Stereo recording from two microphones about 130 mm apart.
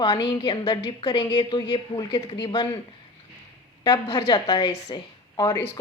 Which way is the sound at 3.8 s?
35° left (ahead or behind).